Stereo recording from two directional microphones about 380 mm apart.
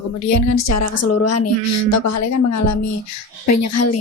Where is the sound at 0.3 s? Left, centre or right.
Left.